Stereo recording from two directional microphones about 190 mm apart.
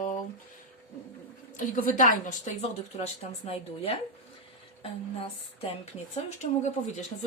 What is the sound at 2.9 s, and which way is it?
Speech, 30° left (ahead or behind).